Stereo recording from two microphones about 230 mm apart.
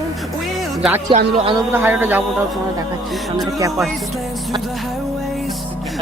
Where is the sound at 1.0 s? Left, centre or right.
Right.